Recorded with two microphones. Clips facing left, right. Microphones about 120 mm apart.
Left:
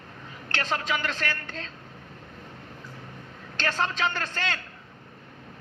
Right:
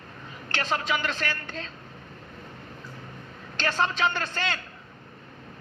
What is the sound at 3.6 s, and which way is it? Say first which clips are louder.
A man's voice: right 2 dB; 15° right (ahead or behind).